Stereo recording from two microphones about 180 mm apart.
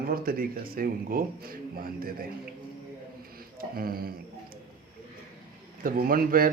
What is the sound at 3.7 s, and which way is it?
Speech, 55° right (ahead or behind).